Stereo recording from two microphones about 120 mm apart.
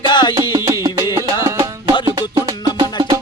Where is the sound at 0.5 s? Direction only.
25° right (ahead or behind).